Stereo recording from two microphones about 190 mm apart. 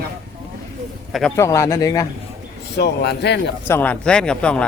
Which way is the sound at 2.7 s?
60° left (ahead or behind).